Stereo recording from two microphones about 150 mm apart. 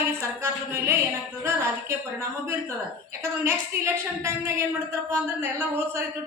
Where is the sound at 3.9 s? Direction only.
20° right (ahead or behind).